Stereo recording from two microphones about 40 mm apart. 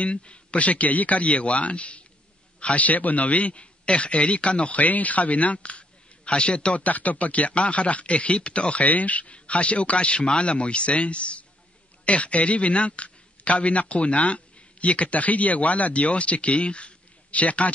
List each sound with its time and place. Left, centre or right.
0.0 s a man's voice: left
4.8 s a man's voice: left
6.8 s a man's voice: left
8.8 s a man's voice: left